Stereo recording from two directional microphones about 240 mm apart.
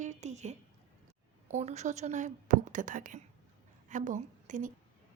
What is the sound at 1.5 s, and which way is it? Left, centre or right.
A woman's voice, right.